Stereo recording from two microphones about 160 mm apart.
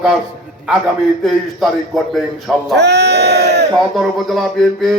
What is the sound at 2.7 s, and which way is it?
Speech, 90° right.